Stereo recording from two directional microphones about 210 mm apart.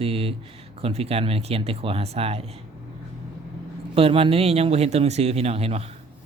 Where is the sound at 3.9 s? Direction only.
25° right (ahead or behind).